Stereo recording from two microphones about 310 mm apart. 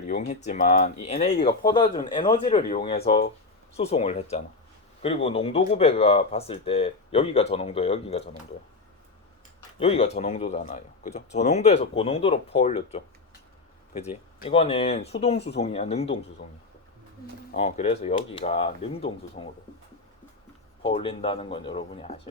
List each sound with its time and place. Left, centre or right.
0.1 s speech: left
9.8 s speech: centre
17.5 s speech: left
20.8 s speech: centre